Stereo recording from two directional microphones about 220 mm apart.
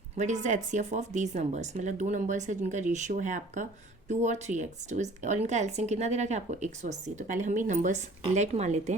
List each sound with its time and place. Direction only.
0.2 s speech: 35° right (ahead or behind)